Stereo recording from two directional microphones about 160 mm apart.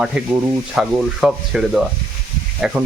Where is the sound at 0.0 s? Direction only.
5° right (ahead or behind).